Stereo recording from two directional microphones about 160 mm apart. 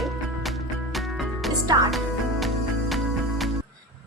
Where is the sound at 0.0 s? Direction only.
Centre (ahead or behind).